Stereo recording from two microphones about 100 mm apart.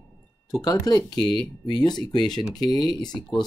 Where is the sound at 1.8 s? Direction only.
45° left (ahead or behind).